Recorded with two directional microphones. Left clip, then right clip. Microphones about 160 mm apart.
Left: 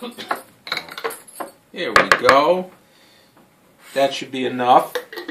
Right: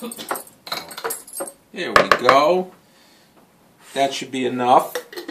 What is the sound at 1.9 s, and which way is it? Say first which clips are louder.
Speech: left 1 dB; 15° right (ahead or behind).